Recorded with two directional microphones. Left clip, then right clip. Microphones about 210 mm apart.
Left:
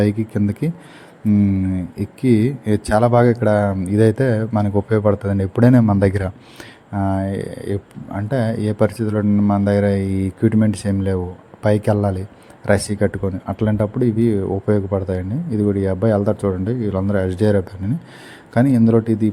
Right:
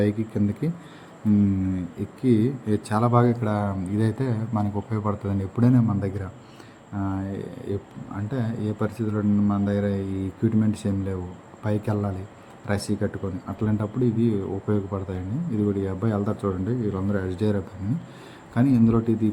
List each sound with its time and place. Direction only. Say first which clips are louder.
0.0 s speech: left 5 dB; 35° left (ahead or behind)
2.2 s speech: left 5 dB; 35° left (ahead or behind)